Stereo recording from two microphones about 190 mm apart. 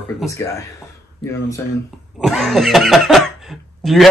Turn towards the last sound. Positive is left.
turn(degrees=0)  # may be behind; listen again after turning